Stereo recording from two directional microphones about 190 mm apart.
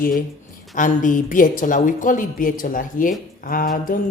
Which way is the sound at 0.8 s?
45° left (ahead or behind).